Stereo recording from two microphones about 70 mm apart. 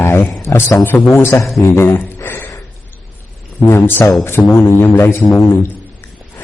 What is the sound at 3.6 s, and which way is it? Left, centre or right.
A man's voice, left.